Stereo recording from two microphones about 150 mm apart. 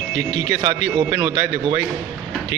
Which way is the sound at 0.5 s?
25° right (ahead or behind).